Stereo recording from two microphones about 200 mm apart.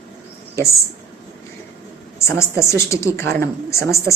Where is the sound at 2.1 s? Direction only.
15° left (ahead or behind).